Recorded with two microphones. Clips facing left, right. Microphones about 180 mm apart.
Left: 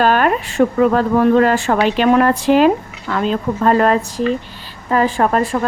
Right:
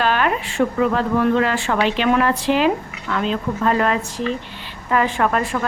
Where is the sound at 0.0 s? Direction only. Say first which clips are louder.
Left 5 dB; 45° left (ahead or behind).